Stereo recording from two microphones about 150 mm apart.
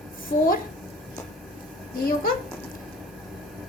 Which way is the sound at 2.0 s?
75° left (ahead or behind).